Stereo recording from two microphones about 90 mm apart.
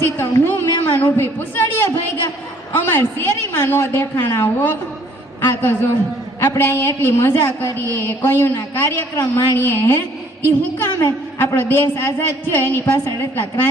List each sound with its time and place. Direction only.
0.2 s a woman's voice: 25° left (ahead or behind)